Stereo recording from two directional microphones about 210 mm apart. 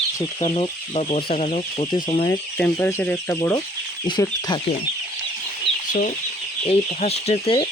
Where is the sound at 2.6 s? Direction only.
10° left (ahead or behind).